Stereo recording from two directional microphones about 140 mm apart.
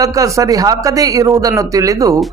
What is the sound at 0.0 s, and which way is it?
A man's voice, 25° right (ahead or behind).